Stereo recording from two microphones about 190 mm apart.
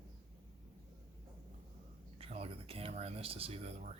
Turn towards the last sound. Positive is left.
turn(degrees=-35)  # may be behind; listen again after turning